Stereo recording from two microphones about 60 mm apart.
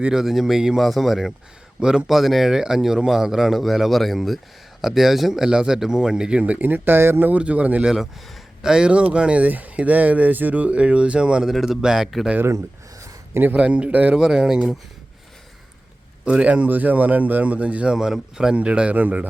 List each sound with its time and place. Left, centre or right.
0.0 s speech: centre; by 7.3 s right
7.3 s speech: right
11.4 s speech: centre
13.3 s speech: right
13.6 s speech: centre
14.2 s speech: centre
16.2 s speech: right
17.9 s speech: centre; by 19.2 s right